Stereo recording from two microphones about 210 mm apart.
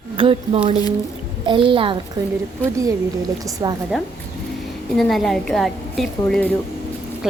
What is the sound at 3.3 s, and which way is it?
Speech, 20° right (ahead or behind).